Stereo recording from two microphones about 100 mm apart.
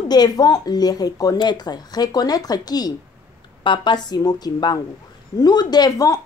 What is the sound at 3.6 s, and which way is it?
Speech, 50° left (ahead or behind).